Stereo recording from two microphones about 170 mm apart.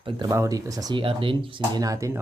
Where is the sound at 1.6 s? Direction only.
20° right (ahead or behind).